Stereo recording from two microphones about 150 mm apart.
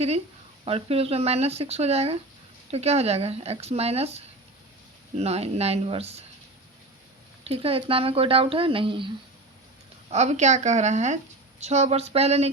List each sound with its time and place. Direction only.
0.6 s speech: 40° right (ahead or behind)
7.4 s speech: 40° right (ahead or behind)
10.1 s speech: 50° right (ahead or behind)